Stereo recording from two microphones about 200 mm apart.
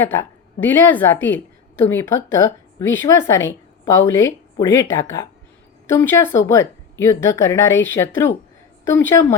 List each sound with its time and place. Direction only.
0.6 s a woman's voice: 10° left (ahead or behind)